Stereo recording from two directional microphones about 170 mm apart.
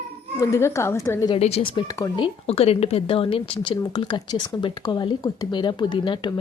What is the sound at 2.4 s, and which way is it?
Speech, 35° left (ahead or behind).